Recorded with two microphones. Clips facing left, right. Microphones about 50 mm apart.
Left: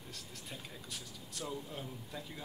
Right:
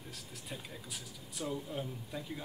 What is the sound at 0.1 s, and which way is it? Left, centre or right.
Speech, centre.